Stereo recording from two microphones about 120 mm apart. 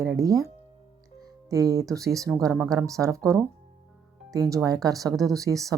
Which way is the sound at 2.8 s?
25° right (ahead or behind).